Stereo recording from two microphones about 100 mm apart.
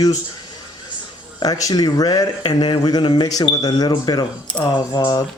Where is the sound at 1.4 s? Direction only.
35° left (ahead or behind).